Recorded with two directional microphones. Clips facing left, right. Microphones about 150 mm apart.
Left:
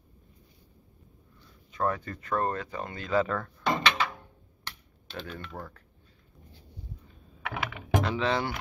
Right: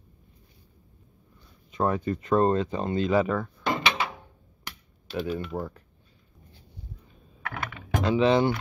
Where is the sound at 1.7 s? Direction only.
20° right (ahead or behind).